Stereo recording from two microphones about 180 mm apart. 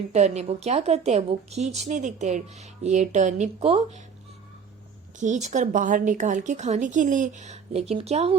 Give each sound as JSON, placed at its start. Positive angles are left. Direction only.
{"t": 0.1, "sound": "a woman's voice", "side_deg": -40}
{"t": 5.2, "sound": "speech", "side_deg": -40}